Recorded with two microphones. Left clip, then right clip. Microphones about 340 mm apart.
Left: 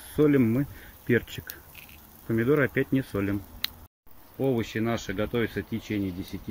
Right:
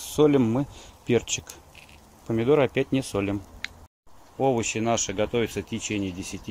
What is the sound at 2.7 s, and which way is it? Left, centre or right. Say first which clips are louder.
Speech: right 1 dB; centre.